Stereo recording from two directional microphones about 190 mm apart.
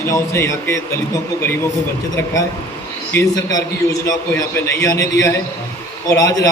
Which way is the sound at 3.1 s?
15° left (ahead or behind).